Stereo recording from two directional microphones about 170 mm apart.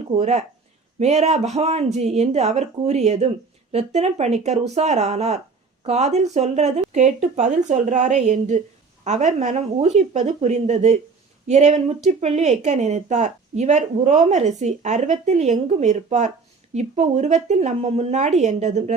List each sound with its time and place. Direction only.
0.0 s a woman's voice: 40° right (ahead or behind)